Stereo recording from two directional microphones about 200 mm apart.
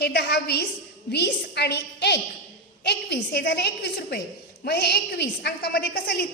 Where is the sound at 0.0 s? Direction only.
55° left (ahead or behind).